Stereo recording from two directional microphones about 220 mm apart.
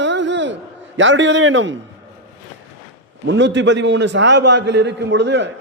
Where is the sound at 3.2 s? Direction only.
55° right (ahead or behind).